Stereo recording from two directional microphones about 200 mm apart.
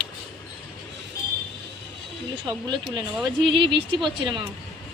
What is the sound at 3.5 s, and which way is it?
Speech, 25° right (ahead or behind).